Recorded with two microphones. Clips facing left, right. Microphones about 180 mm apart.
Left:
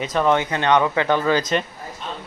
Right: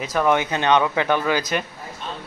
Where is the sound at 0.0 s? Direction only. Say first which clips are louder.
Left 1 dB; 5° right (ahead or behind).